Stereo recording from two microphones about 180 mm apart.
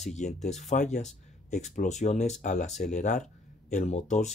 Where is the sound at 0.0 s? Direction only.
40° left (ahead or behind).